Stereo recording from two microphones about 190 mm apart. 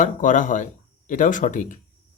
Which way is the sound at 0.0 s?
40° left (ahead or behind).